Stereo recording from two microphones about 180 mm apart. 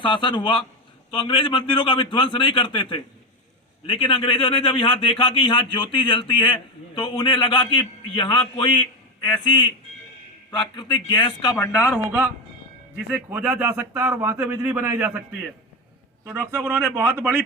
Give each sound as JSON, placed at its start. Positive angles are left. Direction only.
{"t": 0.0, "sound": "speech", "side_deg": 25}
{"t": 13.1, "sound": "speech", "side_deg": -10}
{"t": 16.2, "sound": "speech", "side_deg": -10}